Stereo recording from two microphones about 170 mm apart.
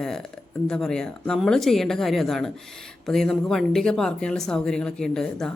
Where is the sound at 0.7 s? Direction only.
5° left (ahead or behind).